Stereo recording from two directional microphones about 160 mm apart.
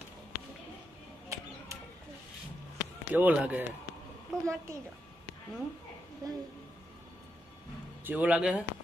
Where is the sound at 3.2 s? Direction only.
10° right (ahead or behind).